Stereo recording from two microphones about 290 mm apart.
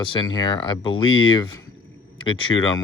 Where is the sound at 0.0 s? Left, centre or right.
Centre.